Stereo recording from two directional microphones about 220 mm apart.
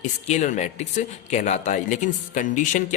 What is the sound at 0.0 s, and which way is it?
Speech, 35° left (ahead or behind).